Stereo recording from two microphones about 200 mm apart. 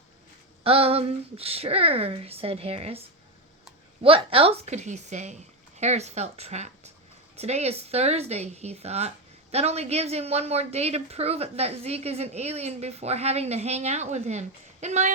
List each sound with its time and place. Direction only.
0.6 s speech: 30° right (ahead or behind)
4.0 s speech: 25° right (ahead or behind)